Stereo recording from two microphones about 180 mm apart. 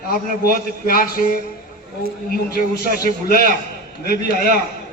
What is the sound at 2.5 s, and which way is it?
A man's voice, 55° left (ahead or behind).